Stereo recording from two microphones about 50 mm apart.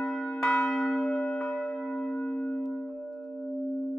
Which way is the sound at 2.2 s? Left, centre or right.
Left.